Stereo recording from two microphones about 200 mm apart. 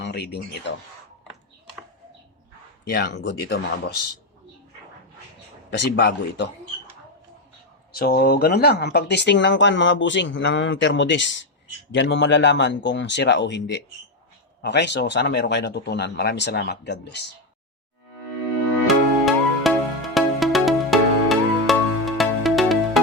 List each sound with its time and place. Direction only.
0.0 s speech: 55° left (ahead or behind)
2.8 s speech: 55° left (ahead or behind)
5.7 s speech: 55° left (ahead or behind)
7.9 s speech: 50° left (ahead or behind)
18.9 s music: centre (ahead or behind)